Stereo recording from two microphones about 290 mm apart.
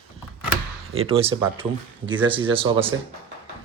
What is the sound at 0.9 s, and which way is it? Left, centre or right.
Speech, centre.